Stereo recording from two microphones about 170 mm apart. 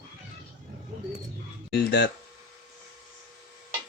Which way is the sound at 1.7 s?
80° left.